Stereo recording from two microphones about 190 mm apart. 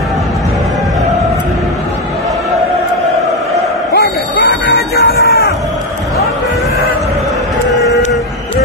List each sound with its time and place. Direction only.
3.9 s bow-wow: 55° left (ahead or behind)
4.6 s music: 55° left (ahead or behind)